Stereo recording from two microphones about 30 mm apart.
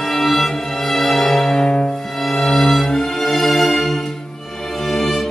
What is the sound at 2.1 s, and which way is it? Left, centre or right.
Music, centre.